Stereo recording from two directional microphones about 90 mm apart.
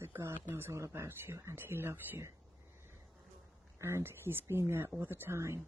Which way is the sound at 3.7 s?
30° right (ahead or behind).